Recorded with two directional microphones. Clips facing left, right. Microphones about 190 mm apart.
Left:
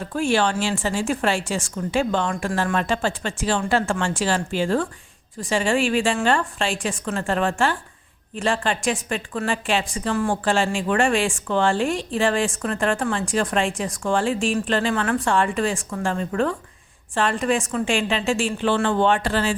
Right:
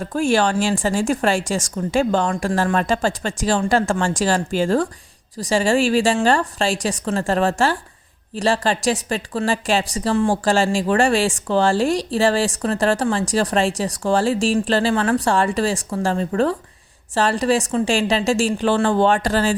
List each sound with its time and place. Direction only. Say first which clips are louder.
0.1 s a woman's voice: right 3 dB; 40° right (ahead or behind)